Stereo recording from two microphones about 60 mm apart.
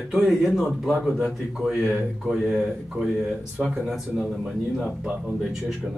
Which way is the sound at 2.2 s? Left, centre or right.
Centre.